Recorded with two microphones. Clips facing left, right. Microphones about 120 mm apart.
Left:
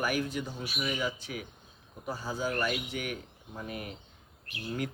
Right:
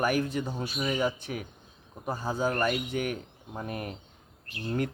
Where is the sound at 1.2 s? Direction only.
55° right (ahead or behind).